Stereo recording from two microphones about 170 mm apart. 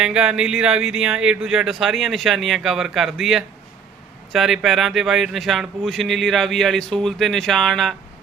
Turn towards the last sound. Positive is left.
turn(degrees=0)  # may be behind; listen again after turning